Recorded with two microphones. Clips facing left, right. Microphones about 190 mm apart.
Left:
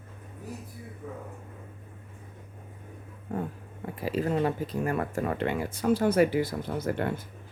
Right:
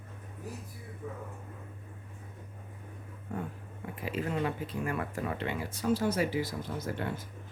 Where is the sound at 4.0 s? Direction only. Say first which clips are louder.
Left 6 dB; 35° left (ahead or behind); by 7.1 s 60° left (ahead or behind).